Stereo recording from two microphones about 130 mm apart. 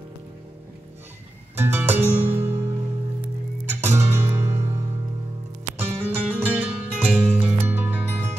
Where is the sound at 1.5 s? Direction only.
15° right (ahead or behind).